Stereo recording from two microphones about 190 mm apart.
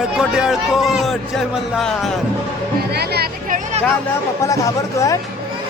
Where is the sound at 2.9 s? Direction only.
60° right (ahead or behind).